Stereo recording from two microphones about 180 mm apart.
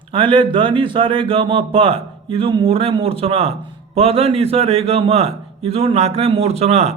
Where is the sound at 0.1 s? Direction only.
30° right (ahead or behind).